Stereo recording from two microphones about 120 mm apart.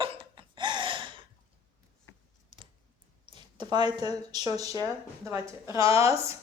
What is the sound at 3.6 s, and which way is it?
Speech, 35° right (ahead or behind).